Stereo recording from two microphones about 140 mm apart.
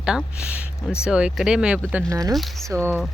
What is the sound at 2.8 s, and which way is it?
Speech, 10° left (ahead or behind).